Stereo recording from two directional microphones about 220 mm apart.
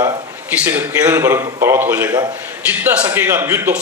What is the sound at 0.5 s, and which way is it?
A man's voice, 5° right (ahead or behind).